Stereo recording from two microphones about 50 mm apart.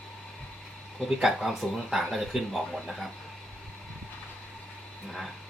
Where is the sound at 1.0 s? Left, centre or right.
Centre.